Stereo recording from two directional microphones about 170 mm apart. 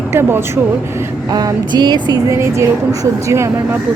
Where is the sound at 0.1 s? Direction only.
15° right (ahead or behind).